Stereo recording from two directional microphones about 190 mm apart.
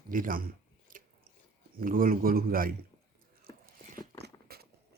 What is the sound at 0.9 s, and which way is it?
Biting, 45° right (ahead or behind).